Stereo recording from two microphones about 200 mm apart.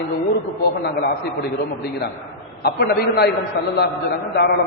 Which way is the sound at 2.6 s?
50° left (ahead or behind).